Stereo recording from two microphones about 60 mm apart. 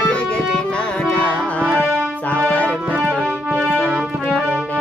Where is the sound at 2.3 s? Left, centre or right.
Left.